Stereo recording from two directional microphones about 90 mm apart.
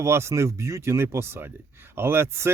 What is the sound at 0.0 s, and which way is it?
A man's voice, 30° right (ahead or behind).